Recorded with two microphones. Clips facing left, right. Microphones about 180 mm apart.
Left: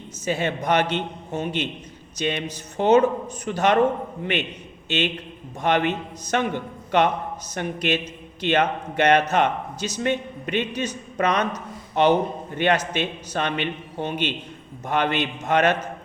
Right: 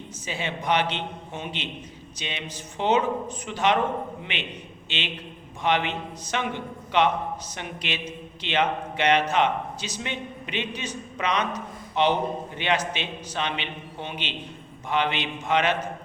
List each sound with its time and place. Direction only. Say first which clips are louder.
0.3 s a man's voice: left 4 dB; 45° left (ahead or behind)
4.9 s a man's voice: left 9 dB; 45° left (ahead or behind)